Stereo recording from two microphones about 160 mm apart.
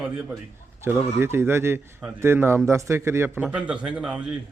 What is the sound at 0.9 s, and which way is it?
Speech, 10° right (ahead or behind).